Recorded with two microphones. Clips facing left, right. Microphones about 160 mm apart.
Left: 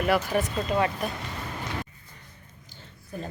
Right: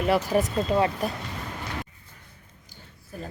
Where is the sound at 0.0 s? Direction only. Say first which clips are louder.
Right 2 dB; 30° right (ahead or behind).